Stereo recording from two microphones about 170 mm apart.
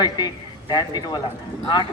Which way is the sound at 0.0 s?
25° left (ahead or behind).